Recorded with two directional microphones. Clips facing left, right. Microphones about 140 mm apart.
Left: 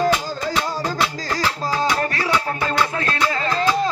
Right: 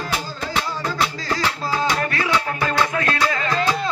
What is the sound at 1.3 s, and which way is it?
Music, 35° left (ahead or behind).